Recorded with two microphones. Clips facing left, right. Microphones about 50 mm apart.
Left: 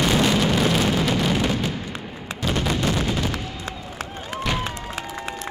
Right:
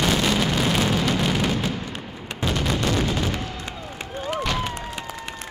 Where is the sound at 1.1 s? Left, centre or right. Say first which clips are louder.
Left 1 dB; centre.